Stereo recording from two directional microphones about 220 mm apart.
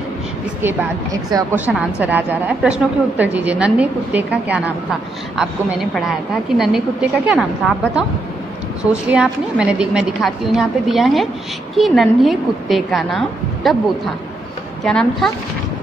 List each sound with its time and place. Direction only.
1.3 s a woman's voice: 5° right (ahead or behind)
9.1 s a woman's voice: 5° right (ahead or behind)